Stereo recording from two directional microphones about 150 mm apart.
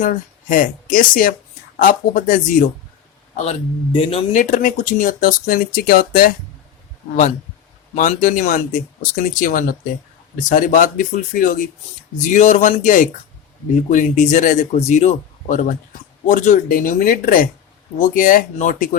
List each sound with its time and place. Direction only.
0.0 s speech: 60° left (ahead or behind)
3.3 s a man's voice: 45° left (ahead or behind)
4.3 s speech: 55° left (ahead or behind)
7.9 s speech: 60° left (ahead or behind)
12.2 s speech: 55° left (ahead or behind)